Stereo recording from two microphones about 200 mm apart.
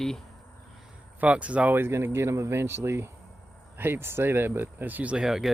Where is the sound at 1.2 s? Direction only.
5° right (ahead or behind).